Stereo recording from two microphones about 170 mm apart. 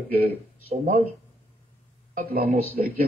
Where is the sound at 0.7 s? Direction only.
45° right (ahead or behind).